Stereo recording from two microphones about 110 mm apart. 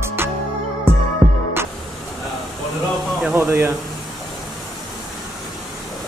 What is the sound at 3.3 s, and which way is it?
Speech, 20° right (ahead or behind).